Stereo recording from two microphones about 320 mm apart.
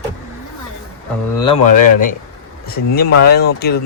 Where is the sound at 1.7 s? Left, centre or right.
Left.